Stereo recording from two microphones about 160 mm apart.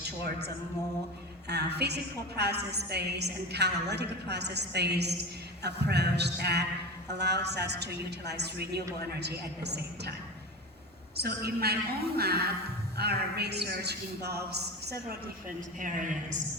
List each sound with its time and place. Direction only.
1.5 s a woman's voice: 90° right
11.2 s a woman's voice: 80° right
13.0 s a woman's voice: 90° right
15.4 s a woman's voice: 55° right (ahead or behind)